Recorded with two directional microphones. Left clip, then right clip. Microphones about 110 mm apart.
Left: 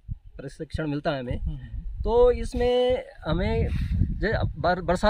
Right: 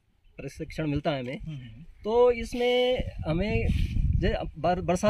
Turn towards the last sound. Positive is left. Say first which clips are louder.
# left 2 dB
turn(degrees=-10)  # may be behind; listen again after turning